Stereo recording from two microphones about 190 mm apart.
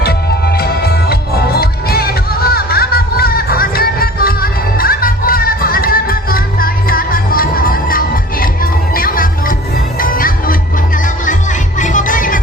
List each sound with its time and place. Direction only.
0.0 s music: 55° left (ahead or behind)